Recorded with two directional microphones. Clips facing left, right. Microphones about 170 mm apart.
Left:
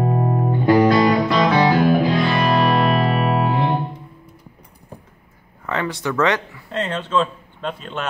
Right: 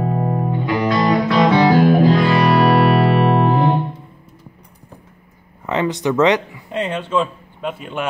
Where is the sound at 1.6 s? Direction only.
40° right (ahead or behind).